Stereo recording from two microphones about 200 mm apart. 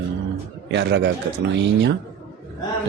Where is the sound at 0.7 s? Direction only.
60° right (ahead or behind).